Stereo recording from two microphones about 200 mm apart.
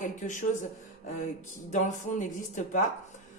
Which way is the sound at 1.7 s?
35° left (ahead or behind).